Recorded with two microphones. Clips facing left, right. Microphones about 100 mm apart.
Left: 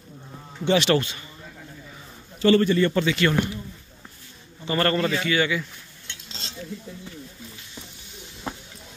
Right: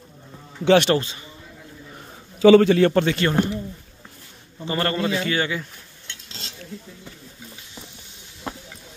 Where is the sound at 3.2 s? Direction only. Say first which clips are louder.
Right 1 dB; 35° right (ahead or behind).